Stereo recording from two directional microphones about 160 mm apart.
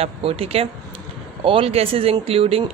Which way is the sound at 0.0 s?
35° right (ahead or behind).